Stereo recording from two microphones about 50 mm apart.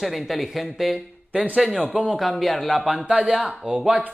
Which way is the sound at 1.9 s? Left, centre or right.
Centre.